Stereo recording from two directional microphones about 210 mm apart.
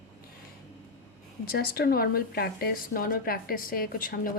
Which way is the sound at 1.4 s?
45° left (ahead or behind).